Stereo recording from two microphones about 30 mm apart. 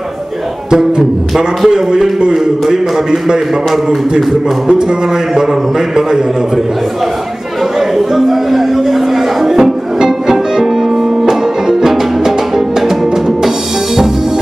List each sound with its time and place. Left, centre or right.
0.7 s speech: centre
5.3 s a man's voice: centre
8.1 s music: centre